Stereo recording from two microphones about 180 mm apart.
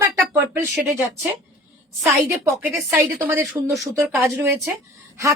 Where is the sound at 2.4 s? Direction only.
10° right (ahead or behind).